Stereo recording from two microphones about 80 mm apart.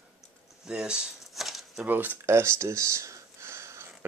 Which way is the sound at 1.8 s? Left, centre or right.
Right.